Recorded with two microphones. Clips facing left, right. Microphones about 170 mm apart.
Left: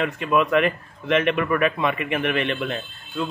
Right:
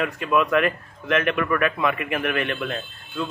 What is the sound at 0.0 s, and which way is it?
A man's voice, centre (ahead or behind).